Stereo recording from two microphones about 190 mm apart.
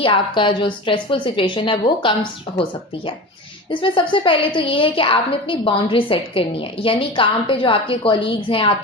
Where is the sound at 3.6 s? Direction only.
25° left (ahead or behind).